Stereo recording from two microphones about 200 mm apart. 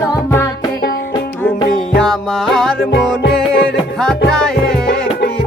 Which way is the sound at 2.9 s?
55° left (ahead or behind).